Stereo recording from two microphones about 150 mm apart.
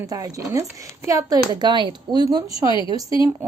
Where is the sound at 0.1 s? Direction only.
25° right (ahead or behind).